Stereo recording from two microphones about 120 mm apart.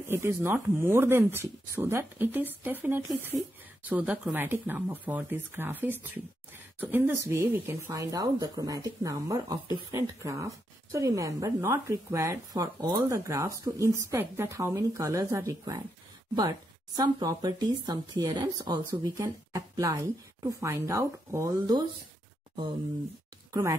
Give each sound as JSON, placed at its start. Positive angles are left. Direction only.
{"t": 0.1, "sound": "speech", "side_deg": -25}
{"t": 23.5, "sound": "speech", "side_deg": -30}